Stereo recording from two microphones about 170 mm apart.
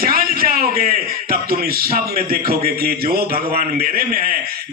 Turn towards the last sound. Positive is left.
turn(degrees=-60)  # may be behind; listen again after turning